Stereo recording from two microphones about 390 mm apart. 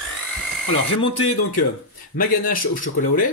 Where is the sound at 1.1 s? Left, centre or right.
Left.